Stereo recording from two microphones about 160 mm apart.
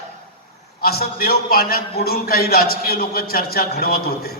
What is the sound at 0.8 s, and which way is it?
A man's voice, 75° left (ahead or behind).